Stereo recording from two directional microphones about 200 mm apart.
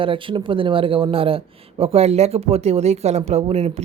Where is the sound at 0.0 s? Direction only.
25° right (ahead or behind).